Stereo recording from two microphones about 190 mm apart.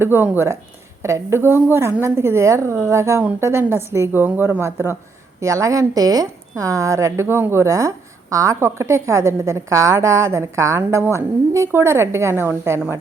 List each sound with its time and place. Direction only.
0.0 s a woman's voice: 10° right (ahead or behind)